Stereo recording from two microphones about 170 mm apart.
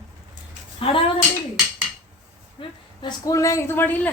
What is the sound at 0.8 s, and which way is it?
Speech, 35° left (ahead or behind).